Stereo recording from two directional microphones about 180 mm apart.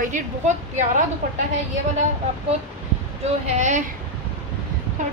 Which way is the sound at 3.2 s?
40° right (ahead or behind).